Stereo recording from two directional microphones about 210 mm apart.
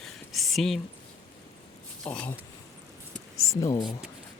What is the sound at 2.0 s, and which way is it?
Speech, 5° left (ahead or behind).